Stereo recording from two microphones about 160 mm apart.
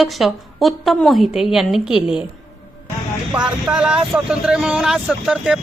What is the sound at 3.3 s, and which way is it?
A woman's voice, 5° right (ahead or behind).